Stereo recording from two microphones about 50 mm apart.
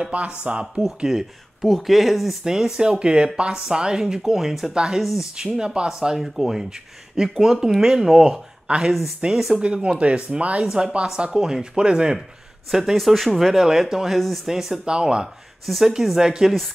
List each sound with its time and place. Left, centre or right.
0.1 s speech: right
0.8 s speech: centre
2.4 s speech: centre
8.6 s speech: centre
12.9 s speech: centre
14.5 s speech: centre
15.6 s speech: centre